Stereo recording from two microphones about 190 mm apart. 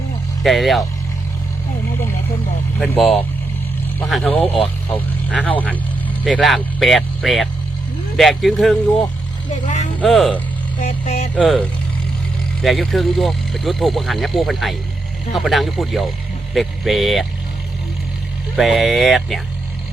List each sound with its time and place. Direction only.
0.4 s speech: centre (ahead or behind)
2.7 s speech: 5° left (ahead or behind)
10.8 s speech: 40° left (ahead or behind)
11.3 s speech: 5° left (ahead or behind)
18.5 s speech: centre (ahead or behind)